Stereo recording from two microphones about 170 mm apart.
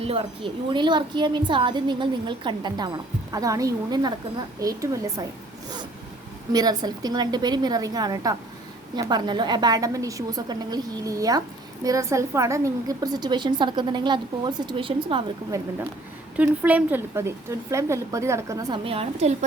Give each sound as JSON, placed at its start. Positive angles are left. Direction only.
{"t": 0.0, "sound": "a woman's voice", "side_deg": -35}
{"t": 6.5, "sound": "a woman's voice", "side_deg": -25}
{"t": 15.5, "sound": "speech", "side_deg": -15}
{"t": 18.9, "sound": "a woman's voice", "side_deg": -35}